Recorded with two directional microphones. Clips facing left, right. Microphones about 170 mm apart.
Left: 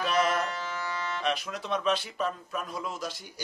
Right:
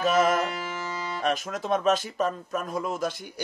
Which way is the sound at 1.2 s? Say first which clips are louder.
Right 6 dB; 45° right (ahead or behind).